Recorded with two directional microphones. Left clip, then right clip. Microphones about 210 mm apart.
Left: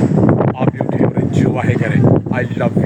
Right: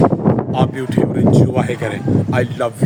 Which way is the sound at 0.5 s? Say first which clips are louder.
Even; 10° right (ahead or behind).